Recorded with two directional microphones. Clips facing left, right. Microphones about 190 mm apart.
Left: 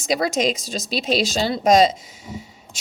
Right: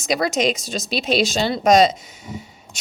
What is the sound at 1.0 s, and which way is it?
Speech, 35° left (ahead or behind).